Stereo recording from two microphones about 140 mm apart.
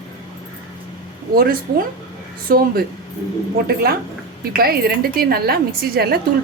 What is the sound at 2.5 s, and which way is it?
Speech, 90° right.